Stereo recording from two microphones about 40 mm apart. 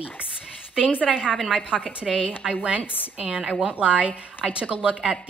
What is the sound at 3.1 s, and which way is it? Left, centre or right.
A woman's voice, right.